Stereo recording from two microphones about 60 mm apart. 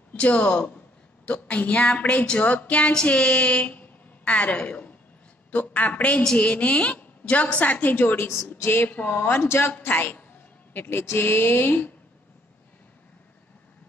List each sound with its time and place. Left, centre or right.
0.1 s a woman's voice: centre; by 9.8 s left
9.8 s a woman's voice: left